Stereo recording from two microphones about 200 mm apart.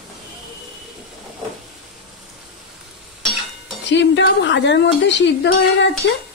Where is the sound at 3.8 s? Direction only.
60° left (ahead or behind).